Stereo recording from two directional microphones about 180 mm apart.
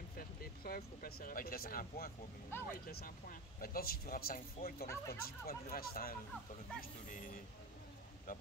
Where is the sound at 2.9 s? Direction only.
55° left (ahead or behind).